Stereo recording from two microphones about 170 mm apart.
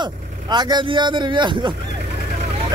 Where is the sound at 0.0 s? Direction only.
25° right (ahead or behind).